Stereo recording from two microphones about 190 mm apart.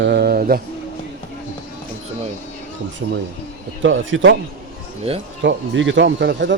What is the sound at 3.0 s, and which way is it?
Mantra, 65° right (ahead or behind).